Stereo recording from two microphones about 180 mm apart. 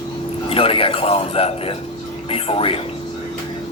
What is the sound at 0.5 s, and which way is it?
A man's voice, 30° left (ahead or behind).